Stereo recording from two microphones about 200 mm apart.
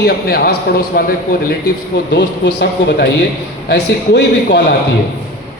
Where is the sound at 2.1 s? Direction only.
60° left (ahead or behind).